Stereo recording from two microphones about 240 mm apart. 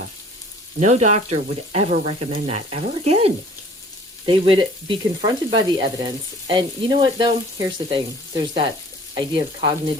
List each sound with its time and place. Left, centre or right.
0.8 s frying: right
9.1 s frying: right